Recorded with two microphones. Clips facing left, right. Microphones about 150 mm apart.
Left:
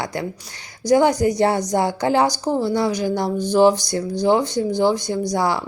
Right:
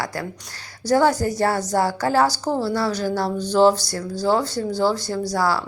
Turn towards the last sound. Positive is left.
turn(degrees=20)  # may be behind; listen again after turning